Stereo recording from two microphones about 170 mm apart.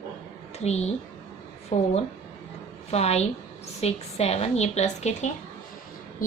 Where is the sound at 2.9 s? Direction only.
40° left (ahead or behind).